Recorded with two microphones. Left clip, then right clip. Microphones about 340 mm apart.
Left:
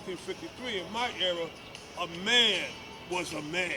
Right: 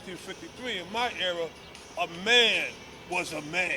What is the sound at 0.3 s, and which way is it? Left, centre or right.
Speech, right.